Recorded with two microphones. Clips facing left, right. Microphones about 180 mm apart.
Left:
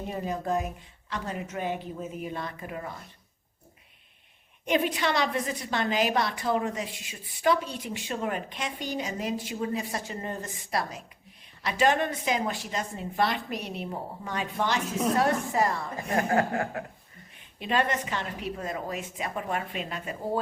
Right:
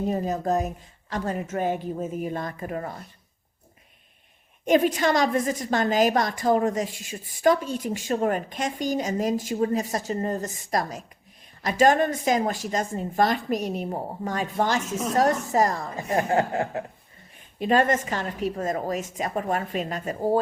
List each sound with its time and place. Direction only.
0.1 s a woman's voice: 40° right (ahead or behind)
4.6 s a woman's voice: 45° right (ahead or behind)
16.1 s speech: 25° right (ahead or behind)
17.6 s a woman's voice: 45° right (ahead or behind)